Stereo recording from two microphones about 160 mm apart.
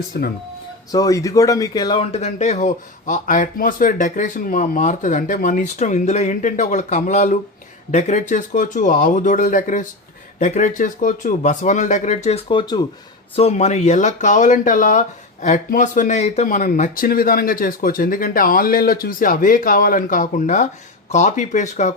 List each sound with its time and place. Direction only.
0.1 s speech: 85° left
0.9 s speech: 20° left (ahead or behind)
2.1 s speech: 45° left (ahead or behind); by 12.8 s 30° left (ahead or behind)
13.3 s speech: 40° left (ahead or behind)